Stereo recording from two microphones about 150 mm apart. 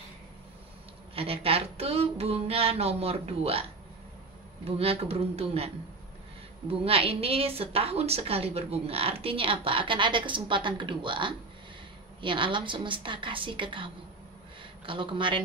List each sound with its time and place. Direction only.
1.1 s a sound: 40° right (ahead or behind)
4.6 s a woman's voice: 40° right (ahead or behind)
6.7 s a woman's voice: 40° right (ahead or behind)
14.9 s a woman's voice: 35° right (ahead or behind)